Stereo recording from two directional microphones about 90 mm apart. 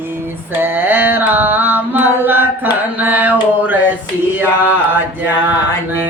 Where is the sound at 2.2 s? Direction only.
20° right (ahead or behind).